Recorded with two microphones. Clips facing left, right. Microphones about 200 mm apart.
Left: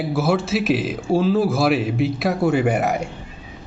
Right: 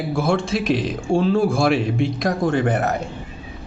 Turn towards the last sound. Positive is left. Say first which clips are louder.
# left 1 dB
turn(degrees=10)  # may be behind; listen again after turning